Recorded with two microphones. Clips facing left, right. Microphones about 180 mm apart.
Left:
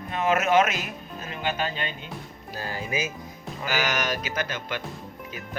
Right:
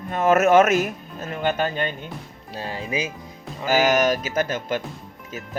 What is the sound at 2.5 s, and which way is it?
Speech, 25° right (ahead or behind).